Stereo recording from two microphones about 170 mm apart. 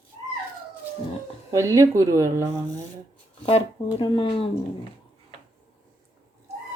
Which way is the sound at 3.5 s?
35° left (ahead or behind).